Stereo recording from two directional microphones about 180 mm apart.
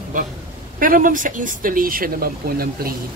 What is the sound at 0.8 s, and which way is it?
Speech, 50° right (ahead or behind).